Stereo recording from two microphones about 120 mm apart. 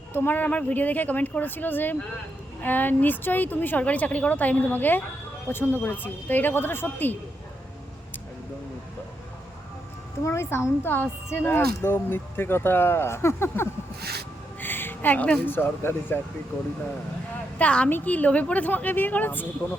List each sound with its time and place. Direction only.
0.1 s a woman's voice: 15° left (ahead or behind)
10.2 s a woman's voice: 20° left (ahead or behind)
17.6 s a woman's voice: 10° left (ahead or behind)